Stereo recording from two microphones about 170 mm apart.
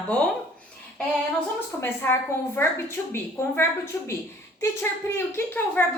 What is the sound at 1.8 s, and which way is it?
A woman's voice, 15° left (ahead or behind).